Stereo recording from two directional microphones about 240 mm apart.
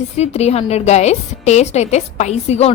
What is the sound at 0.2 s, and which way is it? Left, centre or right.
A woman's voice, left.